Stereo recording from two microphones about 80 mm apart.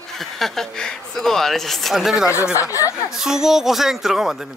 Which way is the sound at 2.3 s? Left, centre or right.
Left.